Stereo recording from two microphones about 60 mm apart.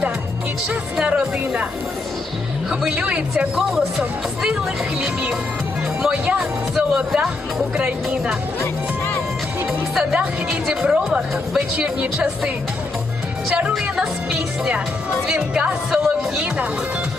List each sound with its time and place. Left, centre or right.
0.9 s speech: centre
3.5 s speech: centre
6.0 s speech: centre
10.8 s speech: centre
13.5 s speech: centre
15.9 s speech: centre